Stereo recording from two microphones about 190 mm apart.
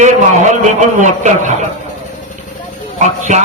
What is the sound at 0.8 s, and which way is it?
Speech, 40° right (ahead or behind).